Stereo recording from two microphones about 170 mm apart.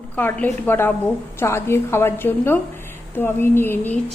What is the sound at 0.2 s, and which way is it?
A woman's voice, 10° left (ahead or behind).